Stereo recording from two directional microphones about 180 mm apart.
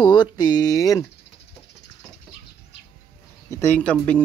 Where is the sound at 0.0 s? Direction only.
25° left (ahead or behind).